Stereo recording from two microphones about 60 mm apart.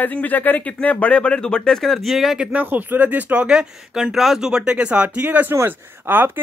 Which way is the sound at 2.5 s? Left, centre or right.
Right.